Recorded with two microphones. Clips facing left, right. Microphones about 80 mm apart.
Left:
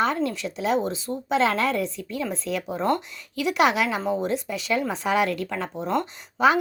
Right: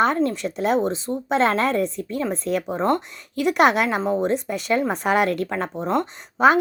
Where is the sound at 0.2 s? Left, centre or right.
Right.